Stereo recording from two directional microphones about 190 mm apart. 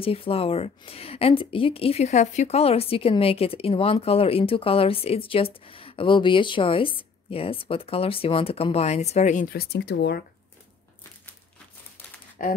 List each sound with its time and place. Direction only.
0.0 s a woman's voice: 30° left (ahead or behind); by 10.2 s 60° left (ahead or behind)
12.4 s speech: 45° left (ahead or behind)